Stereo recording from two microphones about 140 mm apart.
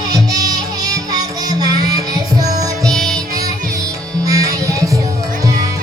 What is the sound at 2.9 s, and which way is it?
Music, 5° left (ahead or behind).